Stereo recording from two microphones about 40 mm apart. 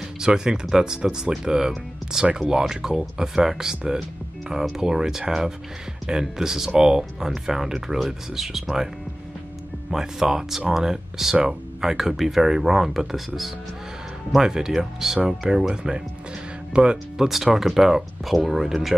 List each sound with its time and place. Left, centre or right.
0.2 s speech: centre
9.8 s speech: centre
17.3 s speech: centre